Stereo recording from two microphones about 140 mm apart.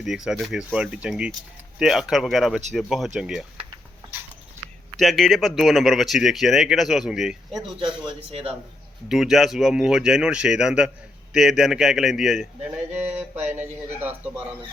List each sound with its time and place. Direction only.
0.0 s speech: centre (ahead or behind)
4.9 s speech: centre (ahead or behind)
7.8 s a man's voice: 40° right (ahead or behind)
9.0 s speech: 5° right (ahead or behind)